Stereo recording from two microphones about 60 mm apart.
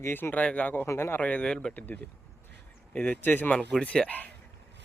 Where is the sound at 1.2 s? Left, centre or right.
Left.